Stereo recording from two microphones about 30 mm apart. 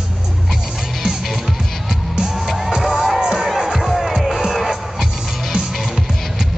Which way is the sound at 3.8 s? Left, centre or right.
Centre.